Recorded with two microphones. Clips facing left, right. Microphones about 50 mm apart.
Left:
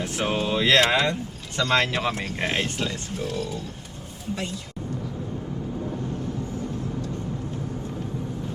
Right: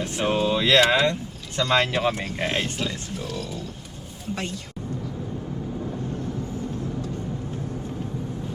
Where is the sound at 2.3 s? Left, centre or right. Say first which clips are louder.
Even; centre.